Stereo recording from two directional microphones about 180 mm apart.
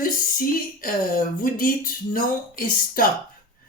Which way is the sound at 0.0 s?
50° left (ahead or behind).